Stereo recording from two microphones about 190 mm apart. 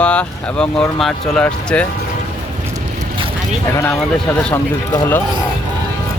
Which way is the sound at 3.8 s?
10° left (ahead or behind).